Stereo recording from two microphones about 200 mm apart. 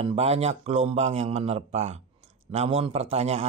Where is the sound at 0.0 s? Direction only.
30° right (ahead or behind).